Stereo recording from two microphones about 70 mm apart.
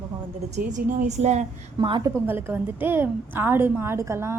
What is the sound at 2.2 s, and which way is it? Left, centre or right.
A woman's voice, right.